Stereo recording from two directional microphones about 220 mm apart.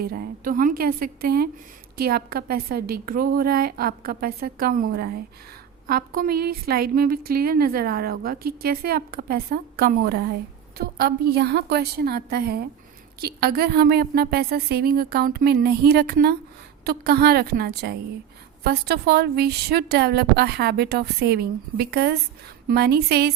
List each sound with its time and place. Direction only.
0.0 s a woman's voice: 45° right (ahead or behind)